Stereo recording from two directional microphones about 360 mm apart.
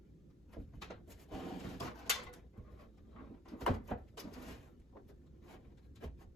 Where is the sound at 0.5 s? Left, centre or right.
Centre.